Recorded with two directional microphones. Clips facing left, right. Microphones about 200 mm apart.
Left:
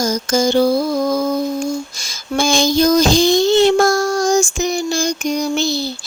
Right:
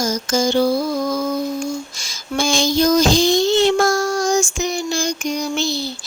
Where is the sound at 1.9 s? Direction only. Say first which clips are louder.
Left 3 dB; 40° left (ahead or behind).